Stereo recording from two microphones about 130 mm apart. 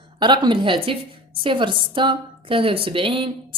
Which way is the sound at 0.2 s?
35° right (ahead or behind).